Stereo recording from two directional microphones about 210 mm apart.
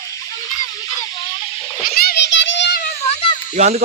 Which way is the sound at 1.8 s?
45° left (ahead or behind).